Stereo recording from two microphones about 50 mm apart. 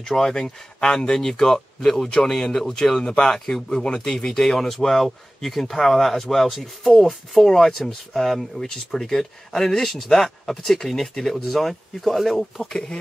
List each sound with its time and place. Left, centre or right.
0.0 s speech: centre
12.7 s speech: centre